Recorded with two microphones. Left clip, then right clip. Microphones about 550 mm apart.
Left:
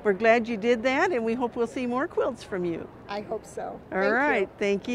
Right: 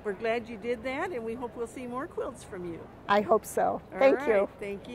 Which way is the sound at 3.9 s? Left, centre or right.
Left.